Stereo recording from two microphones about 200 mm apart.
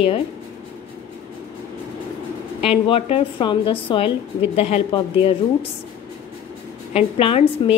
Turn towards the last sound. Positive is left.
turn(degrees=30)  # may be behind; listen again after turning